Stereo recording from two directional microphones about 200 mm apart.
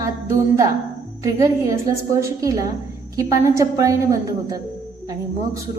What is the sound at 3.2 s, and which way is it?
Speech, 15° right (ahead or behind).